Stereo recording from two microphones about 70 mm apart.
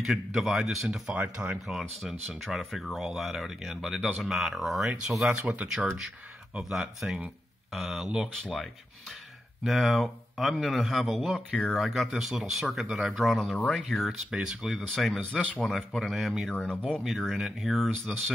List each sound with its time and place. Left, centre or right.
0.0 s speech: centre
1.0 s speech: centre
1.7 s speech: centre
9.7 s speech: centre
16.5 s speech: centre
17.0 s speech: centre